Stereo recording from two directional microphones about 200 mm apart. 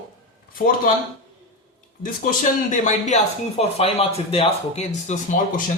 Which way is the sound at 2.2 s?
40° left (ahead or behind).